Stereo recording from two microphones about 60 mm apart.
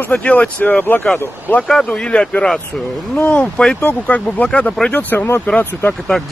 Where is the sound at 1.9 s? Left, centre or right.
Centre.